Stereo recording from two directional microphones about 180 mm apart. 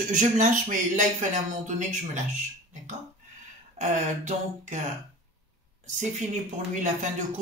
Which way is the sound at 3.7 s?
40° right (ahead or behind).